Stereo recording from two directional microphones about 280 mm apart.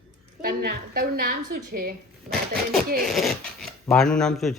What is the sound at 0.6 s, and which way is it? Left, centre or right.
A woman's voice, right.